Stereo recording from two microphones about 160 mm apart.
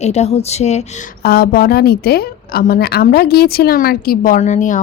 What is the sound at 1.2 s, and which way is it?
A woman's voice, 80° left.